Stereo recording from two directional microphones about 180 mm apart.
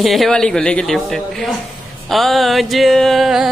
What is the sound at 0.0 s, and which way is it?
Music, centre (ahead or behind).